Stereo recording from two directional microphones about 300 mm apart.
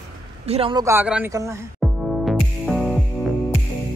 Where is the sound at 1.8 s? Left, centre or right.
Centre.